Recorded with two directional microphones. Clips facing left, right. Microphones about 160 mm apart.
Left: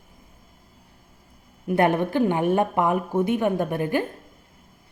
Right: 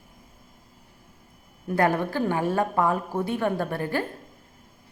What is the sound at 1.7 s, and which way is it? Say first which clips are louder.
A woman's voice: left 3 dB; 20° left (ahead or behind).